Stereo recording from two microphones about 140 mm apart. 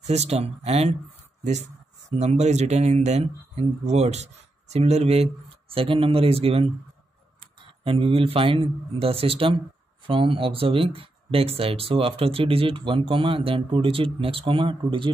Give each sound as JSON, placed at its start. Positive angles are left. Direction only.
{"t": 0.0, "sound": "speech", "side_deg": -50}